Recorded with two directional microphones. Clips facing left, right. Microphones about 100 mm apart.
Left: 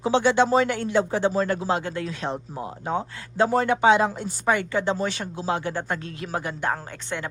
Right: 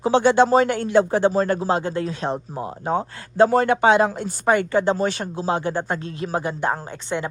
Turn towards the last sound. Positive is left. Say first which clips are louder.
# right 4 dB
turn(degrees=-20)  # may be behind; listen again after turning